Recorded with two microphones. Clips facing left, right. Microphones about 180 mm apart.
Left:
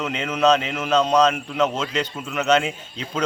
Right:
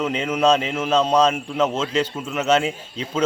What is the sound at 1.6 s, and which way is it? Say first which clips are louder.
Speech: right 1 dB; 5° right (ahead or behind).